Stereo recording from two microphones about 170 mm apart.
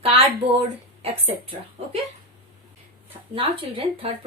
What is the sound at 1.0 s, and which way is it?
Speech, 35° right (ahead or behind).